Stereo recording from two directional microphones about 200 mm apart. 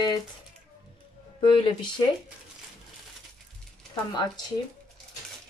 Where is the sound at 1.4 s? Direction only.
25° left (ahead or behind).